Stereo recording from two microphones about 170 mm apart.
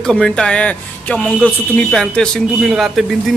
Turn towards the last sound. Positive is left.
turn(degrees=0)  # may be behind; listen again after turning